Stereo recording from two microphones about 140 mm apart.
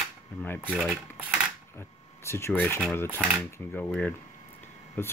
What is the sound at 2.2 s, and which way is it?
Speech, 20° left (ahead or behind).